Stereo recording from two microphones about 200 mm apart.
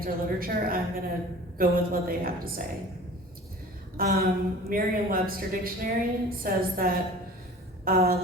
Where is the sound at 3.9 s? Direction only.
50° right (ahead or behind).